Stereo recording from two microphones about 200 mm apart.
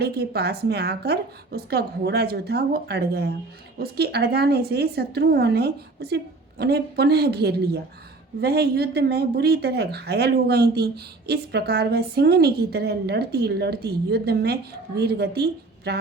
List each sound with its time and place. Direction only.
0.0 s speech: 55° right (ahead or behind)